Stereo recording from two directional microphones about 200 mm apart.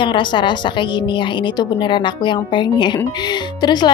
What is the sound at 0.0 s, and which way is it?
Speech, 25° left (ahead or behind).